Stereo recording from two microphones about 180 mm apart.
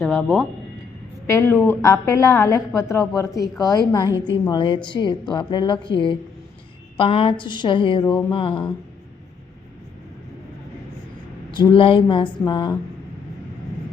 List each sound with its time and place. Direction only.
0.0 s a woman's voice: 10° left (ahead or behind)
1.3 s a woman's voice: 15° left (ahead or behind); by 8.7 s 30° left (ahead or behind)
11.5 s speech: 25° left (ahead or behind)